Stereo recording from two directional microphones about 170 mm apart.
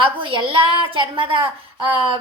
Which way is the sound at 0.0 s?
30° right (ahead or behind).